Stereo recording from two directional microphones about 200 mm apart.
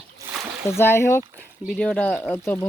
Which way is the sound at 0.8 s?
10° left (ahead or behind).